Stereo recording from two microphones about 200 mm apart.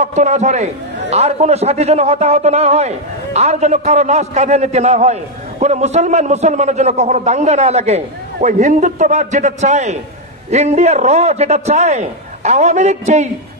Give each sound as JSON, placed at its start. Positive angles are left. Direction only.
{"t": 0.0, "sound": "a man's voice", "side_deg": -35}